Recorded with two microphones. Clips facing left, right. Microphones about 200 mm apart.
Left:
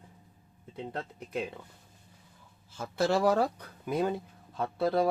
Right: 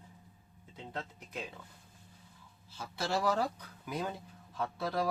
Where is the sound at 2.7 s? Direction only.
50° left (ahead or behind).